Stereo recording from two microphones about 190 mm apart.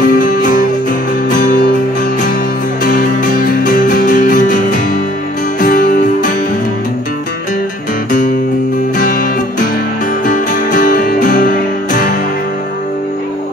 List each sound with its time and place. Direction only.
0.0 s music: 45° left (ahead or behind)
2.8 s music: 45° left (ahead or behind)
8.9 s music: 45° left (ahead or behind)